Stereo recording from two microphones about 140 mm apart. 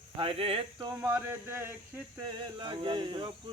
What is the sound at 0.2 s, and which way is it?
Singing, 45° right (ahead or behind).